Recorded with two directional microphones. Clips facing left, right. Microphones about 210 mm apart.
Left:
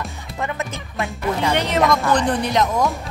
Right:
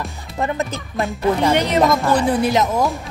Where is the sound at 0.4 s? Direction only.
35° right (ahead or behind).